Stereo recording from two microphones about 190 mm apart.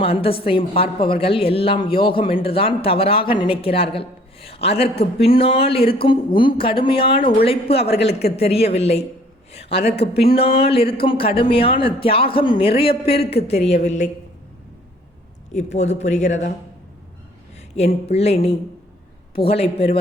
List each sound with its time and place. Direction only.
0.0 s speech: 30° left (ahead or behind)
9.5 s a sound: 35° left (ahead or behind)
9.8 s speech: 30° left (ahead or behind)
15.5 s speech: 35° left (ahead or behind)
17.7 s speech: 35° left (ahead or behind)
19.4 s speech: 30° left (ahead or behind)